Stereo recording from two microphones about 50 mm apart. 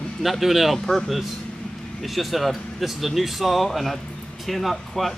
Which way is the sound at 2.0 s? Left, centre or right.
Centre.